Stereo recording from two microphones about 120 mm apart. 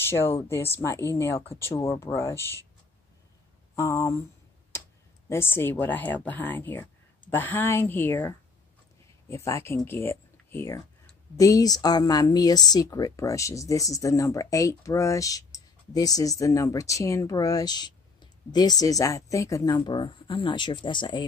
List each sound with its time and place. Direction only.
0.0 s speech: 20° left (ahead or behind)
3.7 s speech: 25° left (ahead or behind)
5.3 s speech: 20° left (ahead or behind); by 21.3 s 40° left (ahead or behind)